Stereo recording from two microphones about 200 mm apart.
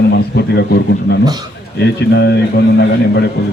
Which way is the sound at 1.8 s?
55° left (ahead or behind).